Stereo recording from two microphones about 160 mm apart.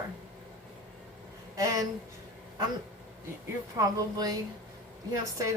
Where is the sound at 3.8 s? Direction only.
20° right (ahead or behind).